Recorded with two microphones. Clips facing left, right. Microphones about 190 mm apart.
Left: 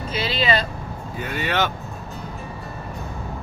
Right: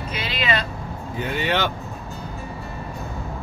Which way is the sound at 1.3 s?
20° right (ahead or behind).